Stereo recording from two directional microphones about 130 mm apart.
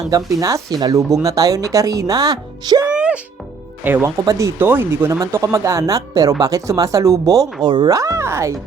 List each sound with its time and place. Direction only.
0.3 s speech: 25° right (ahead or behind)
2.8 s music: 10° right (ahead or behind)
3.8 s speech: 15° right (ahead or behind)